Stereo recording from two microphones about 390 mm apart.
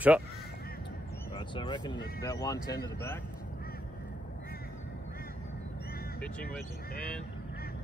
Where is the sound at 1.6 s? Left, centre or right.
Centre.